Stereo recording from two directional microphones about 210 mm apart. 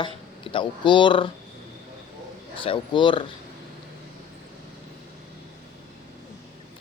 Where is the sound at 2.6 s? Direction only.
25° left (ahead or behind).